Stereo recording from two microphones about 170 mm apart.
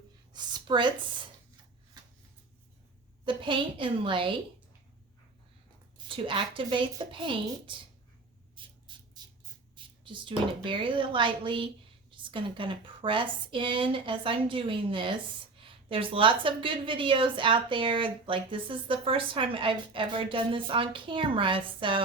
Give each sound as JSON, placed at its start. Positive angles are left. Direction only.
{"t": 0.3, "sound": "a woman's voice", "side_deg": -25}
{"t": 3.2, "sound": "speech", "side_deg": -30}
{"t": 6.1, "sound": "speech", "side_deg": -30}
{"t": 8.6, "sound": "a sound", "side_deg": -30}
{"t": 9.2, "sound": "squawk", "side_deg": -25}
{"t": 9.7, "sound": "a woman's voice", "side_deg": -30}